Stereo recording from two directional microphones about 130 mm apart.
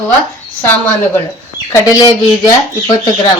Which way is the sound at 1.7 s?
30° left (ahead or behind).